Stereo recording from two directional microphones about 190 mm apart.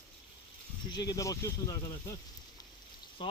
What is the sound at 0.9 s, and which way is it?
Speech, 20° left (ahead or behind).